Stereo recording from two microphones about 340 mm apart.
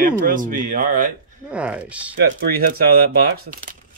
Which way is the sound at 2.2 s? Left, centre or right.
Right.